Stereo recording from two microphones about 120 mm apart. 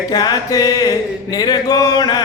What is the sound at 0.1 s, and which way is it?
Mantra, 35° left (ahead or behind).